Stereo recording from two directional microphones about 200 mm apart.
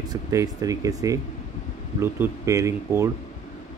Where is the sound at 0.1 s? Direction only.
15° right (ahead or behind).